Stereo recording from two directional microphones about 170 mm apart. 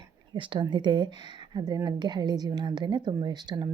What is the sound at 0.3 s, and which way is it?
Speech, 30° right (ahead or behind).